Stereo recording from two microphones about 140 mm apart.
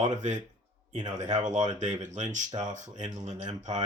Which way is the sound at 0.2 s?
60° right (ahead or behind).